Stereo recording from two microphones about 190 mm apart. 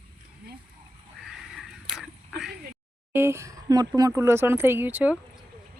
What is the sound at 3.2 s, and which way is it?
Speech, 15° right (ahead or behind).